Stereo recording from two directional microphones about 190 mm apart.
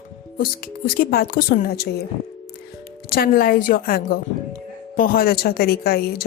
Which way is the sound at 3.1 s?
50° left (ahead or behind).